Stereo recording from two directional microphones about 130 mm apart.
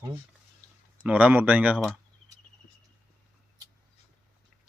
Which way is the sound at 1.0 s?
10° right (ahead or behind).